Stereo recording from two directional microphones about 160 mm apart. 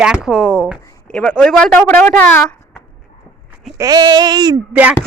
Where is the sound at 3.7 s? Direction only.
25° right (ahead or behind).